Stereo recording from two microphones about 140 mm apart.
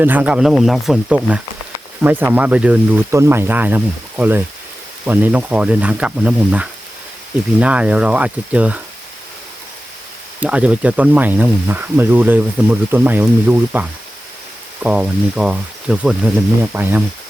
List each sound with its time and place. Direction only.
0.0 s speech: 10° right (ahead or behind)
10.4 s speech: 10° right (ahead or behind)
14.8 s speech: 10° right (ahead or behind)